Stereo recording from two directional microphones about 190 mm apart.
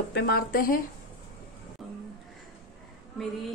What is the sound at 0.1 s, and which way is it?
Speech, 55° left (ahead or behind).